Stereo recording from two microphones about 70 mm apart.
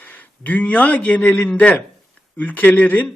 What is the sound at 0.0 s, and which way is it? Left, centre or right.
A man's voice, left.